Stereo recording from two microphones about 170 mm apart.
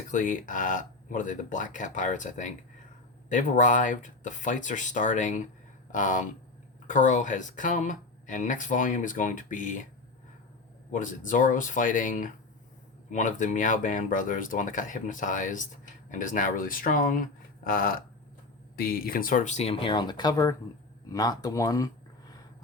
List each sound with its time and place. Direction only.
0.1 s speech: 50° left (ahead or behind)
10.9 s speech: 50° left (ahead or behind); by 21.8 s 20° left (ahead or behind)